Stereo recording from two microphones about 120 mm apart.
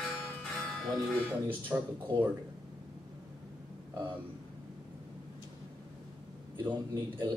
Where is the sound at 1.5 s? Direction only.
15° right (ahead or behind).